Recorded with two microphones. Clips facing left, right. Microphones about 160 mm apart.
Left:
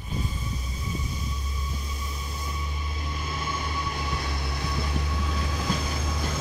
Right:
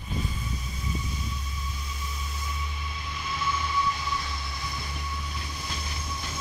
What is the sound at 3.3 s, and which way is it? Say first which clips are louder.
Train: right 5 dB; 45° left (ahead or behind).